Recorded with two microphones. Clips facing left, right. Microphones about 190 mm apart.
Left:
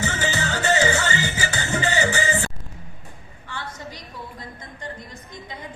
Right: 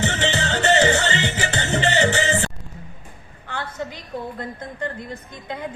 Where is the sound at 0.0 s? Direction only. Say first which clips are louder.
Right 3 dB; 70° right (ahead or behind).